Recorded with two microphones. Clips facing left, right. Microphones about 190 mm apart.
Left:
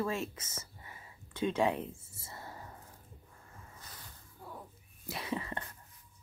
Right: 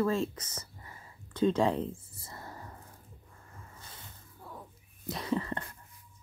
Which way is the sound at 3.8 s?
25° right (ahead or behind).